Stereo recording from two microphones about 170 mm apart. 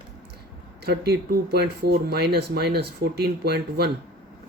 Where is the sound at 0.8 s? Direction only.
70° right (ahead or behind).